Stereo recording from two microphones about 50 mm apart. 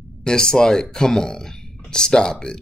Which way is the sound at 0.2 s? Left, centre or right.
Centre.